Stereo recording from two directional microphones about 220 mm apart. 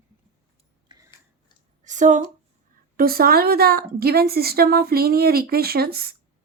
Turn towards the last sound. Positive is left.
turn(degrees=-45)  # may be behind; listen again after turning